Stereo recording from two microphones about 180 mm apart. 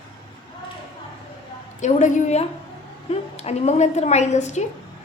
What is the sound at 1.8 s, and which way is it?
A woman's voice, 45° left (ahead or behind).